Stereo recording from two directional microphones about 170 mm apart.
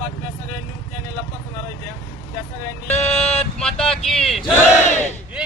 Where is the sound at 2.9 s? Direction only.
40° left (ahead or behind).